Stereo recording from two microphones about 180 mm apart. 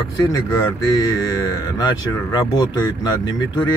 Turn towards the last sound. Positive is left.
turn(degrees=20)  # may be behind; listen again after turning